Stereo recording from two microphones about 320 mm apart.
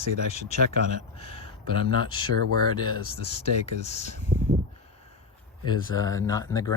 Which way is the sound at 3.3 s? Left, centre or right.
Centre.